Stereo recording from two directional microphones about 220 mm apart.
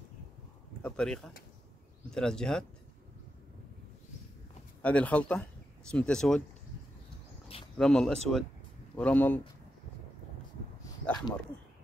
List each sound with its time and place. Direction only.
0.8 s speech: 5° left (ahead or behind)
4.8 s speech: 5° left (ahead or behind)
7.7 s speech: 5° left (ahead or behind)
10.8 s a sound: 20° left (ahead or behind)